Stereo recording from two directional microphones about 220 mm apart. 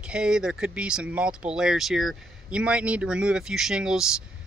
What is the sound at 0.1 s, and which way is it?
Speech, 5° right (ahead or behind).